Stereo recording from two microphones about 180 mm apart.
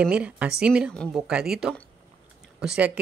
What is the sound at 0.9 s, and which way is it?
A woman's voice, 5° left (ahead or behind).